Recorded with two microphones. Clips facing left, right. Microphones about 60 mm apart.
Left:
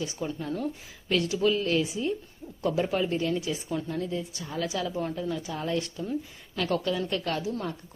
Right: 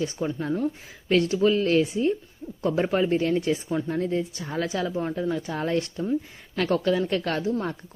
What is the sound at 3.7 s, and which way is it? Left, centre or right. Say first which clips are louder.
Speech: right 5 dB; right.